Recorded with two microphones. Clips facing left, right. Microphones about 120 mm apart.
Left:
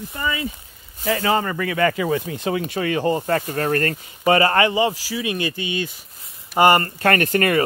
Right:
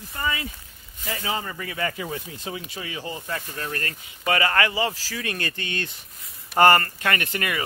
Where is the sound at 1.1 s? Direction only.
80° left; by 4.0 s 50° left (ahead or behind).